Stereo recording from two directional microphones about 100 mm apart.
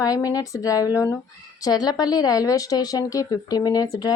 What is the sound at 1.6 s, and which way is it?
Speech, 40° left (ahead or behind).